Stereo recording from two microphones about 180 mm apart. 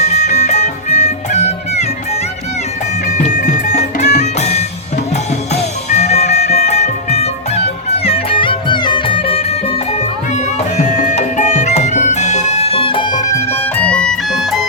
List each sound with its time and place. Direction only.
0.0 s music: 40° left (ahead or behind)
3.2 s music: 40° left (ahead or behind)
5.9 s music: 35° left (ahead or behind); by 14.7 s centre (ahead or behind)